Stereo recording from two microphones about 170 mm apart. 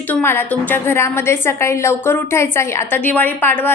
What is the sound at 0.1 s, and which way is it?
A woman's voice, 15° left (ahead or behind).